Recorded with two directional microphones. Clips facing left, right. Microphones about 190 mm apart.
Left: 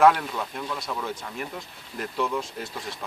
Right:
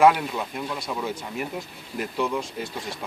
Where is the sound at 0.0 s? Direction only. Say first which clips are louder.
Right 1 dB; 5° right (ahead or behind).